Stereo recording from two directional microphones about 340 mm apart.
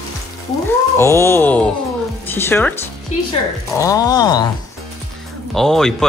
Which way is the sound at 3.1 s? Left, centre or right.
Left.